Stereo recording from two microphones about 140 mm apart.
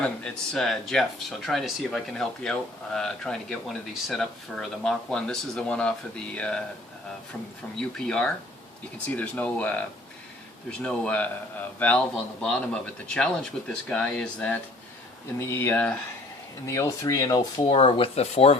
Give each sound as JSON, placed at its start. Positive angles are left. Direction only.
{"t": 0.0, "sound": "a man's voice", "side_deg": 5}
{"t": 7.8, "sound": "a man's voice", "side_deg": 5}
{"t": 16.6, "sound": "speech", "side_deg": 20}